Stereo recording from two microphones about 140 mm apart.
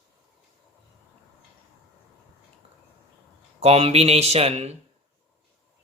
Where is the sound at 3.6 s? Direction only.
45° right (ahead or behind).